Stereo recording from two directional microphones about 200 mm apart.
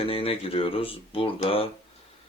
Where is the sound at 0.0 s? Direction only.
30° left (ahead or behind).